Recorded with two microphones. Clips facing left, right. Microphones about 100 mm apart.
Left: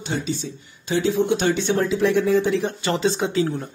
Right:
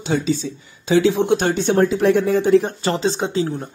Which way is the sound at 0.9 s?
85° right.